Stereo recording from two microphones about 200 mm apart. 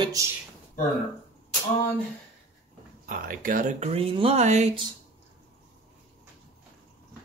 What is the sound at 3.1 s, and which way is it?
Speech, 45° right (ahead or behind).